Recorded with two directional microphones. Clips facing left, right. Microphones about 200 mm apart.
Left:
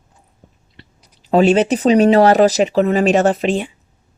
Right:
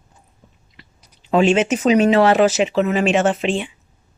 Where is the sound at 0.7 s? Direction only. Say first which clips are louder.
Left 4 dB; 35° left (ahead or behind).